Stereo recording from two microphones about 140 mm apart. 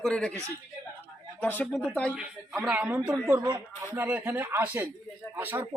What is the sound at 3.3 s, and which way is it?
Speech, 30° right (ahead or behind).